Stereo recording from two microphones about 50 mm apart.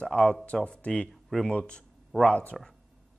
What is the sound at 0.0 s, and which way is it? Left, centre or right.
Speech, centre.